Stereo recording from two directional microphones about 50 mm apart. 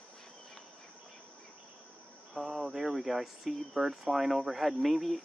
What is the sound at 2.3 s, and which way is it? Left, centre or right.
Speech, centre.